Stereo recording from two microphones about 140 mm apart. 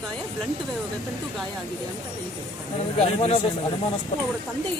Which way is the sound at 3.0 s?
45° left (ahead or behind).